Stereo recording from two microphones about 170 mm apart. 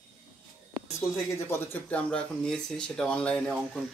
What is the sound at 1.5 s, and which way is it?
Speech, 10° left (ahead or behind).